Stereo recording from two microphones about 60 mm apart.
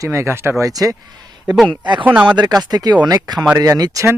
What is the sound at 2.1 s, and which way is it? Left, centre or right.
Speech, right.